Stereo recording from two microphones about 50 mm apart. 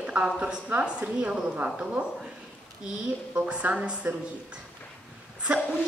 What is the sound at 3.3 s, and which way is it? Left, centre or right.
Speech, right.